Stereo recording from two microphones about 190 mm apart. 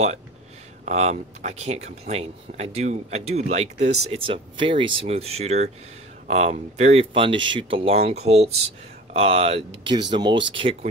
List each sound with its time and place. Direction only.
0.8 s speech: 35° right (ahead or behind)